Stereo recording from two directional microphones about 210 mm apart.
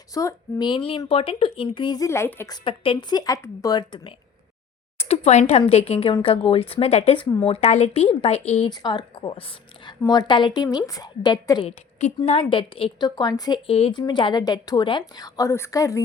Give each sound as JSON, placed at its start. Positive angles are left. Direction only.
{"t": 0.1, "sound": "a woman's voice", "side_deg": 15}
{"t": 2.6, "sound": "a woman's voice", "side_deg": 25}